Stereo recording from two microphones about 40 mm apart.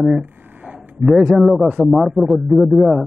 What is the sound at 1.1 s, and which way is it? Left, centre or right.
A man's voice, centre.